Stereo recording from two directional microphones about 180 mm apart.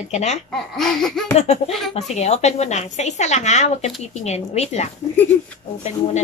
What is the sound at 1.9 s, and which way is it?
A woman's voice, 40° left (ahead or behind).